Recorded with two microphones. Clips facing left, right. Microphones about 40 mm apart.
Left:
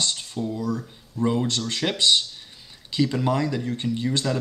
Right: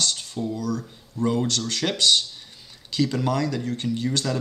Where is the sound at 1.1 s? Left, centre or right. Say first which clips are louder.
Even; centre.